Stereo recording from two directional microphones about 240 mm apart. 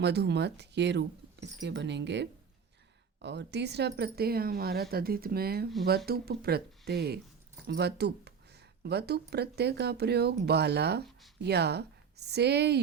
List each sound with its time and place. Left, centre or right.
0.0 s speech: right